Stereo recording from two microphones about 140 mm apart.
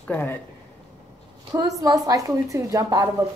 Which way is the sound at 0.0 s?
15° left (ahead or behind).